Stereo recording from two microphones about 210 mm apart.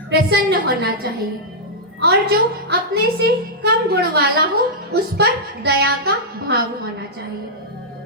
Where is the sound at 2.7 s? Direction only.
55° right (ahead or behind).